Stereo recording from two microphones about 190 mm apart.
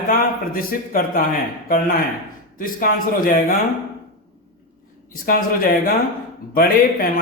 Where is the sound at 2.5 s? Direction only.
45° left (ahead or behind).